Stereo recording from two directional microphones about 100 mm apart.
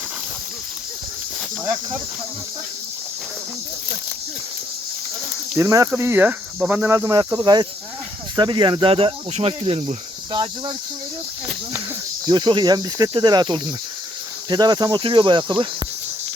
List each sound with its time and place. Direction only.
5.5 s speech: 30° right (ahead or behind)
6.0 s speech: 20° right (ahead or behind)
6.9 s speech: 30° right (ahead or behind); by 8.9 s 50° right (ahead or behind)
8.9 s speech: 70° right (ahead or behind)
10.3 s speech: 55° right (ahead or behind)
12.2 s speech: 50° right (ahead or behind)